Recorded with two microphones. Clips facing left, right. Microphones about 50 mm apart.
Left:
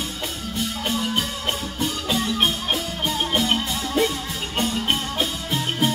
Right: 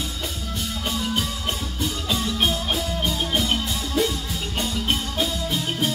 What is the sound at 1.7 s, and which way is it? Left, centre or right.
Music, left.